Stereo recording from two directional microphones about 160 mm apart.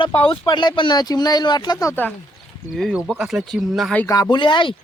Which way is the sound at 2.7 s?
Centre (ahead or behind).